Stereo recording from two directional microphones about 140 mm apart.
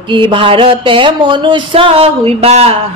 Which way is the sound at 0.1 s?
35° right (ahead or behind).